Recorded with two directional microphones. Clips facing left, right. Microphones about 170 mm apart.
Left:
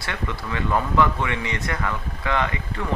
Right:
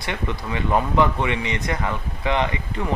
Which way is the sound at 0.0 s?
20° right (ahead or behind).